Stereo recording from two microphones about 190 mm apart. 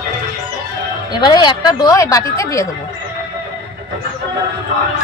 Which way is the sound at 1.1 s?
20° left (ahead or behind).